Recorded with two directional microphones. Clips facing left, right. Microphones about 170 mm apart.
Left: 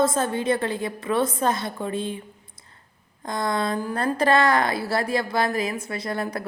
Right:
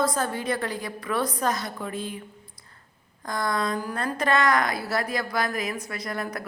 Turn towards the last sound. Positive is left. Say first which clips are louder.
# left 4 dB
turn(degrees=30)  # may be behind; listen again after turning